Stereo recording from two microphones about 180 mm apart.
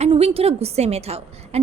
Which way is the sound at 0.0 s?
35° right (ahead or behind).